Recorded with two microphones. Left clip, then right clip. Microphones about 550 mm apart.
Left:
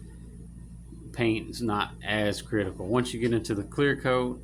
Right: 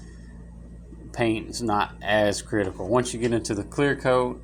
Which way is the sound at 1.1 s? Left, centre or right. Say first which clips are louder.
Right 3 dB; left.